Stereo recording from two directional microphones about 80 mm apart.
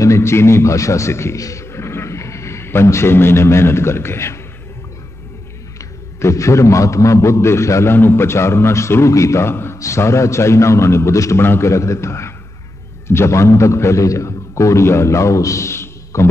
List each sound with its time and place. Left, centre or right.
0.0 s a man's voice: left
5.8 s a man's voice: left